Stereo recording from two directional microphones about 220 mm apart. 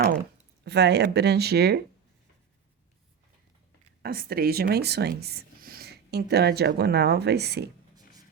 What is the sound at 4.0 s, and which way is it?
Speech, 45° right (ahead or behind).